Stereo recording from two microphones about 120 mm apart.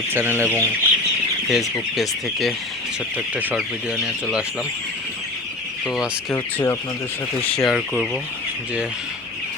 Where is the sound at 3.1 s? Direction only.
15° right (ahead or behind).